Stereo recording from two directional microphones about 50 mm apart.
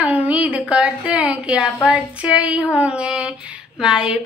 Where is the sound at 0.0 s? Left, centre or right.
Right.